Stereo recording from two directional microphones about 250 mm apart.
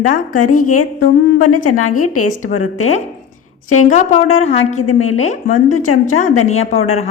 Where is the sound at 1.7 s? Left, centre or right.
Left.